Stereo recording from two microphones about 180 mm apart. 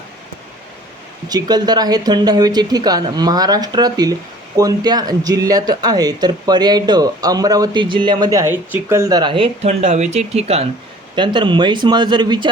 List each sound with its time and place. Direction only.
1.3 s speech: 20° right (ahead or behind)